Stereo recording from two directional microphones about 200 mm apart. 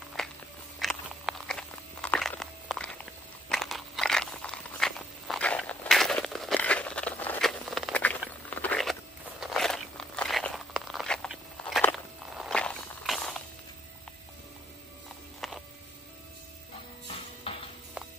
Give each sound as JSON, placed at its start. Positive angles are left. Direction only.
{"t": 0.2, "sound": "walk", "side_deg": 0}
{"t": 0.7, "sound": "a sound", "side_deg": 0}
{"t": 3.4, "sound": "crunch", "side_deg": 0}
{"t": 8.5, "sound": "a sound", "side_deg": 5}
{"t": 9.4, "sound": "crunch", "side_deg": 0}
{"t": 12.4, "sound": "walk", "side_deg": 5}
{"t": 15.4, "sound": "a sound", "side_deg": 0}
{"t": 17.4, "sound": "music", "side_deg": 30}
{"t": 18.0, "sound": "music", "side_deg": -5}